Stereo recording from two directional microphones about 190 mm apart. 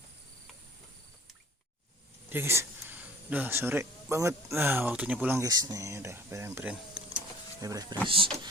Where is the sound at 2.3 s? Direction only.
15° right (ahead or behind).